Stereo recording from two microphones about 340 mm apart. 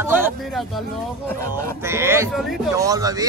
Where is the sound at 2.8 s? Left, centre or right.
Centre.